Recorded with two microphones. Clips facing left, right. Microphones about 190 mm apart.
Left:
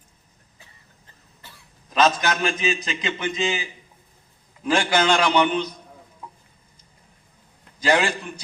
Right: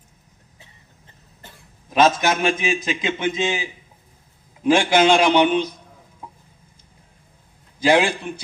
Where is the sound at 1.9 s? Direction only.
20° right (ahead or behind).